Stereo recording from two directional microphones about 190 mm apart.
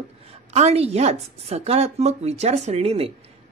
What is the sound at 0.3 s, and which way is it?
Speech, 35° right (ahead or behind).